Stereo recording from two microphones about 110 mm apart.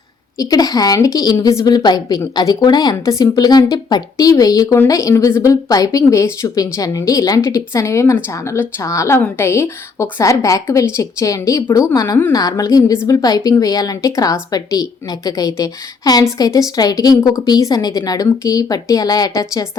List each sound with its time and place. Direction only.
0.3 s a woman's voice: 35° left (ahead or behind)